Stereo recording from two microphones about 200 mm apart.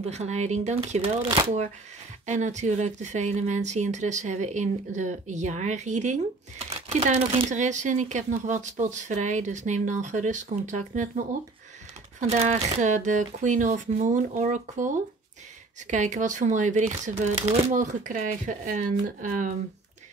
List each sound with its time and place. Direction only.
0.0 s speech: 35° right (ahead or behind)
12.2 s speech: 35° right (ahead or behind)
15.9 s speech: 35° right (ahead or behind)